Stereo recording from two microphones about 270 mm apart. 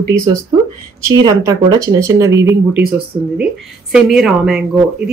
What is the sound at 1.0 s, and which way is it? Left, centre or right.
Speech, centre.